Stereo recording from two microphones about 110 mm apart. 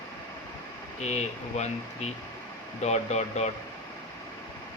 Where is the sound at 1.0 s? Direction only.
90° left.